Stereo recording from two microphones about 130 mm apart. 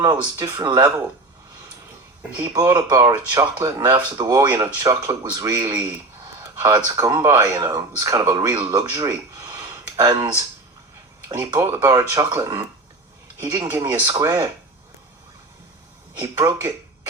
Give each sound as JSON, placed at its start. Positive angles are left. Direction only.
{"t": 0.3, "sound": "speech", "side_deg": -30}
{"t": 2.3, "sound": "speech", "side_deg": -20}
{"t": 11.3, "sound": "speech", "side_deg": -20}
{"t": 13.7, "sound": "speech", "side_deg": -15}
{"t": 16.1, "sound": "speech", "side_deg": -20}